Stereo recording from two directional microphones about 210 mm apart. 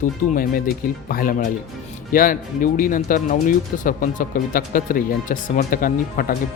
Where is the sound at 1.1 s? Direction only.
40° left (ahead or behind).